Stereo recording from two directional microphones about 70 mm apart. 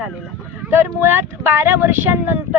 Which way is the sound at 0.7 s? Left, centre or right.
Right.